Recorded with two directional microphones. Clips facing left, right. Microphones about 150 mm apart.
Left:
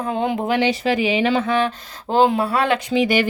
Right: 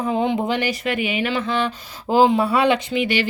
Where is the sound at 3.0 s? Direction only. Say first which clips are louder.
Left 3 dB; 45° left (ahead or behind).